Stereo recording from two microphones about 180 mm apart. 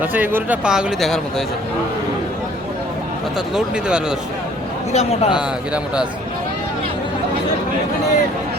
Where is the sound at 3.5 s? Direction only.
5° right (ahead or behind).